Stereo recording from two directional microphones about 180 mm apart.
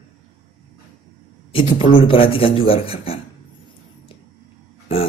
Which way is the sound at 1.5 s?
30° left (ahead or behind).